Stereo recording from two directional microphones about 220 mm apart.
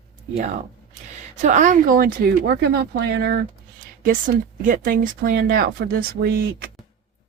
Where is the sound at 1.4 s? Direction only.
35° right (ahead or behind).